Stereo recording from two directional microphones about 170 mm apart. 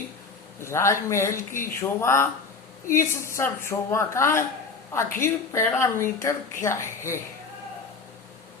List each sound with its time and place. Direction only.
0.6 s a woman's voice: 15° left (ahead or behind)
1.4 s speech: 55° left (ahead or behind)
1.8 s a woman's voice: 15° left (ahead or behind)